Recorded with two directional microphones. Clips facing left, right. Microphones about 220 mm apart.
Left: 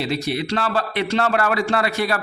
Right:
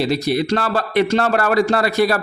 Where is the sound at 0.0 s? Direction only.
40° right (ahead or behind).